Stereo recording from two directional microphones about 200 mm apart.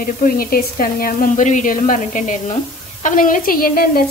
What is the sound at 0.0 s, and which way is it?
A woman's voice, 45° left (ahead or behind).